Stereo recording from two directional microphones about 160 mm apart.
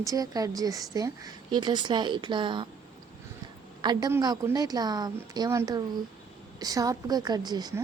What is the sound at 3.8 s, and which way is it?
A woman's voice, 25° right (ahead or behind).